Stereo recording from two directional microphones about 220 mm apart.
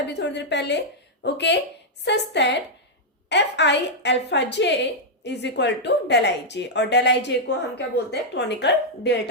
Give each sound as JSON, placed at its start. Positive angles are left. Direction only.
{"t": 0.1, "sound": "a woman's voice", "side_deg": 50}